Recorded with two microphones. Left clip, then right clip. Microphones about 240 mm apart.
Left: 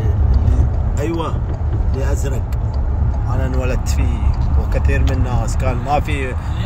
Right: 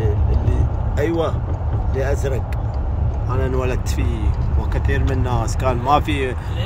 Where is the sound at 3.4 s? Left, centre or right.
Centre.